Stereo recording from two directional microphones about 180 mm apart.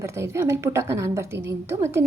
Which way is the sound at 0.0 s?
15° right (ahead or behind).